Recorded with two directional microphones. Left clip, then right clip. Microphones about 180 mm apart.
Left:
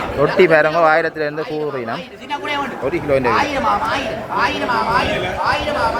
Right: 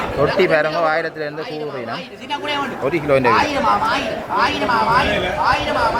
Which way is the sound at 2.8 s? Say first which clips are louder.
Right 2 dB; 5° left (ahead or behind).